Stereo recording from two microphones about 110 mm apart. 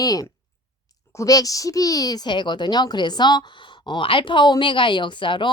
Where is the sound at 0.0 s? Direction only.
35° left (ahead or behind).